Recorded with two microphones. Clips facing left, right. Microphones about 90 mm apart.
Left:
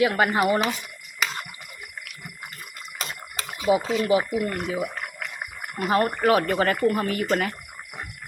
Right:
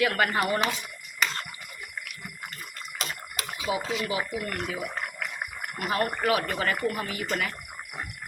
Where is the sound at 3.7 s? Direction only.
30° left (ahead or behind).